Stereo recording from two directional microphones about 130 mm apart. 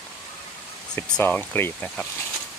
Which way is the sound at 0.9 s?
10° left (ahead or behind).